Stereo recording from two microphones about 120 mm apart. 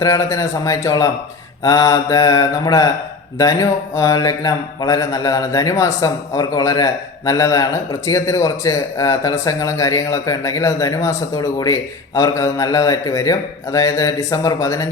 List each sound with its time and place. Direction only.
0.0 s speech: 25° left (ahead or behind)